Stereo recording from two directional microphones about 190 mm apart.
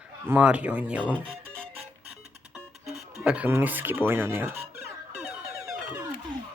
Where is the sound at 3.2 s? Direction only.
5° right (ahead or behind).